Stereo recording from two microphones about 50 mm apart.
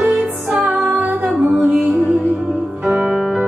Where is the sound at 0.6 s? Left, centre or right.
Right.